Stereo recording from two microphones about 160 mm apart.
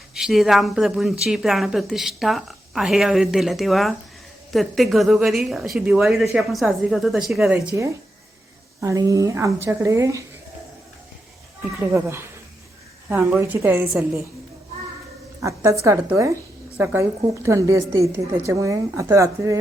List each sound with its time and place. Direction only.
0.1 s a woman's voice: centre (ahead or behind)
8.8 s a woman's voice: 20° right (ahead or behind)
11.9 s a woman's voice: 15° right (ahead or behind)
15.4 s a woman's voice: 20° right (ahead or behind)